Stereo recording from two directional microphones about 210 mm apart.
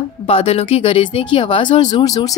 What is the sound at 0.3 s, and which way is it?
A woman's voice, 30° left (ahead or behind).